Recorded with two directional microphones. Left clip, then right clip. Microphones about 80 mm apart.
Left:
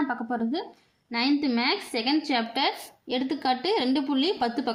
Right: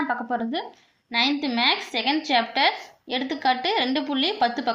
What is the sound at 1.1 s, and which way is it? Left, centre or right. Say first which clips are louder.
A woman's voice: right 3 dB; left.